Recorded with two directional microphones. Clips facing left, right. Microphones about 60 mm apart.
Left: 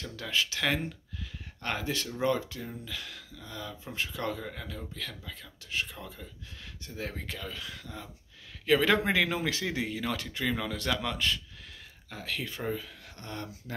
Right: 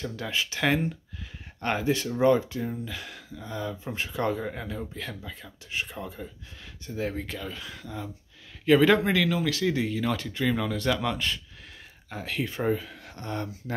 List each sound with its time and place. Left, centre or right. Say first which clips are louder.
0.0 s speech: right 2 dB; centre
7.0 s speech: right 6 dB; centre
9.0 s speech: right 3 dB; centre
9.8 s speech: right 5 dB; centre
12.1 s speech: right 5 dB; right